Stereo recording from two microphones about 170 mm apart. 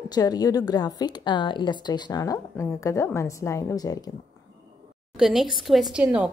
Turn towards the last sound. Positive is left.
turn(degrees=-5)  # may be behind; listen again after turning